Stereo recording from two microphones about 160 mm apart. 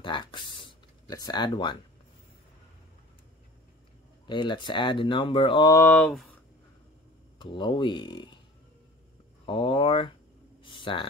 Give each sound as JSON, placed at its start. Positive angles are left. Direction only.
{"t": 0.0, "sound": "speech", "side_deg": 30}
{"t": 4.3, "sound": "speech", "side_deg": 30}
{"t": 5.8, "sound": "speech", "side_deg": 10}
{"t": 7.3, "sound": "speech", "side_deg": 30}
{"t": 9.5, "sound": "speech", "side_deg": 35}
{"t": 10.6, "sound": "a sound", "side_deg": 30}